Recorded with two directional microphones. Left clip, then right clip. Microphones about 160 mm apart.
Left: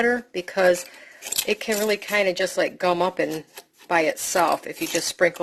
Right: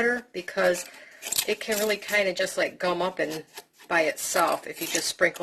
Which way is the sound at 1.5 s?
45° left (ahead or behind).